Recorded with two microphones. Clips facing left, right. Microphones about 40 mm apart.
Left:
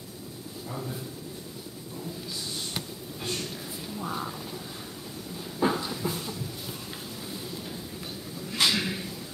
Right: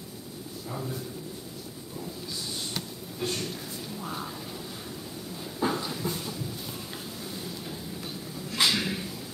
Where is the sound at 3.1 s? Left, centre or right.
Centre.